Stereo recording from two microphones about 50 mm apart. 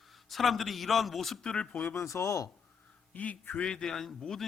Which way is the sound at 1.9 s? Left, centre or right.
Left.